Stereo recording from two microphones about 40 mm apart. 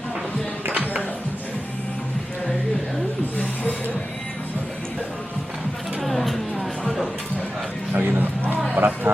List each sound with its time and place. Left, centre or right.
0.7 s music: right
6.0 s music: centre
7.9 s music: right
8.8 s a sound: right